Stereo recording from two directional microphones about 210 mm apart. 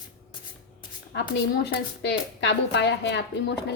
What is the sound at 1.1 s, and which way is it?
A woman's voice, 55° left (ahead or behind).